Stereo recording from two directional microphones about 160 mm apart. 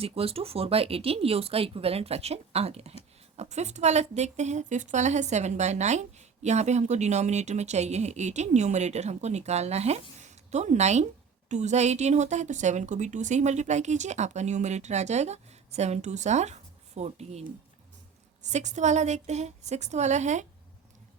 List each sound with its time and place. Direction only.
0.0 s speech: 35° right (ahead or behind)
18.5 s speech: 50° right (ahead or behind)